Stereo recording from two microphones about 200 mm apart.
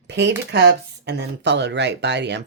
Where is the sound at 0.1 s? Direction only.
60° right (ahead or behind).